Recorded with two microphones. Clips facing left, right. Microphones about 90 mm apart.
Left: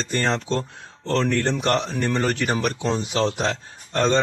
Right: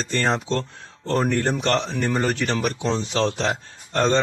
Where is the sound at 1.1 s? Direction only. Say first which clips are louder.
Even; 15° right (ahead or behind).